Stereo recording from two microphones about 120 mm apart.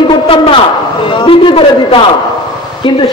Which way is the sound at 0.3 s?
45° left (ahead or behind).